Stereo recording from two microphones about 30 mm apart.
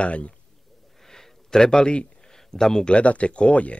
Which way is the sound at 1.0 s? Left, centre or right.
Centre.